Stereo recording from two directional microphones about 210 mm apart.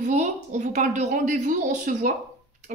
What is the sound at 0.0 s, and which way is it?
Speech, 35° right (ahead or behind).